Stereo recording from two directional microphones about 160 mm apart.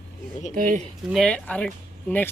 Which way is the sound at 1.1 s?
Centre (ahead or behind).